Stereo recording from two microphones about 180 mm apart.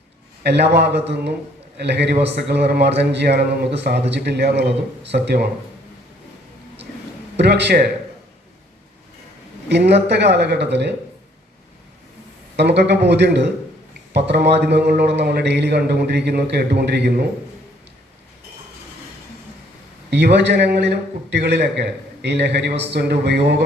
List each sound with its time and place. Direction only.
0.4 s a man's voice: 70° right (ahead or behind)
7.3 s a man's voice: 70° right (ahead or behind)
9.6 s a man's voice: 70° right (ahead or behind)
12.5 s a man's voice: 70° right (ahead or behind)
20.1 s a man's voice: 70° right (ahead or behind)